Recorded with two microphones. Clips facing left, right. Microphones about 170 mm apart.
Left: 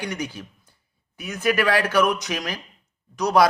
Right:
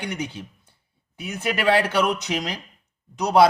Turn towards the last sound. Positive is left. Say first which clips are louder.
# right 2 dB
turn(degrees=-25)  # may be behind; listen again after turning